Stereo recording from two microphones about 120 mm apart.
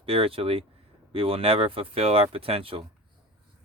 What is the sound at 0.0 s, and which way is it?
Speech, 50° right (ahead or behind).